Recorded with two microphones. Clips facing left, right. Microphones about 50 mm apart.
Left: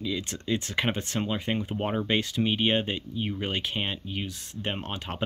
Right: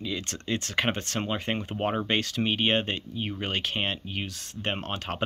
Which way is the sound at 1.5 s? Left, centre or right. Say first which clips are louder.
Even; centre.